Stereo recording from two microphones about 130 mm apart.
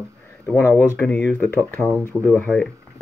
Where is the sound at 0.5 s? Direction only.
20° left (ahead or behind).